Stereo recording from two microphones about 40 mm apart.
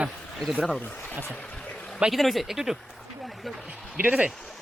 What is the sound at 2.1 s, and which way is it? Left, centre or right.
Speech, centre.